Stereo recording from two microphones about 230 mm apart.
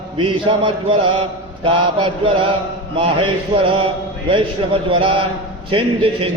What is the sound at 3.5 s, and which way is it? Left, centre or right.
Speech, right.